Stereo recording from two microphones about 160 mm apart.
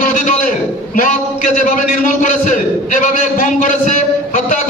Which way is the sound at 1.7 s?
55° left (ahead or behind).